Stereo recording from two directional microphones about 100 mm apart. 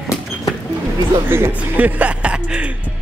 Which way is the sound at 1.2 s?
25° right (ahead or behind).